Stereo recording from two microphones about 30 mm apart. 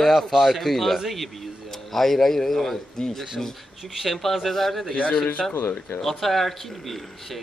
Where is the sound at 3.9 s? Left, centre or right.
Centre.